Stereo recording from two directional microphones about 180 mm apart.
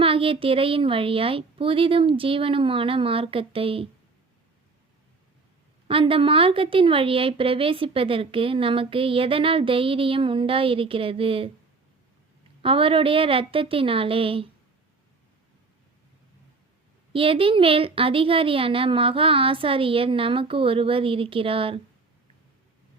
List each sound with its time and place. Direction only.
0.0 s a woman's voice: 30° right (ahead or behind)
5.9 s a woman's voice: 30° right (ahead or behind)
12.6 s a woman's voice: 30° right (ahead or behind)
17.1 s a woman's voice: 30° right (ahead or behind)